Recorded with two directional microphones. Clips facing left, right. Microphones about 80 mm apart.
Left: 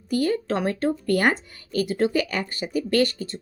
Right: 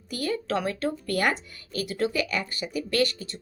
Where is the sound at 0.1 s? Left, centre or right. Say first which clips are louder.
Left 5 dB; left.